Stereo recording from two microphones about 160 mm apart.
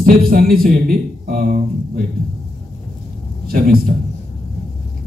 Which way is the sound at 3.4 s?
70° right (ahead or behind).